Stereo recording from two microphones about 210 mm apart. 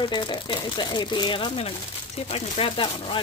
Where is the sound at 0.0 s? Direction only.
20° left (ahead or behind).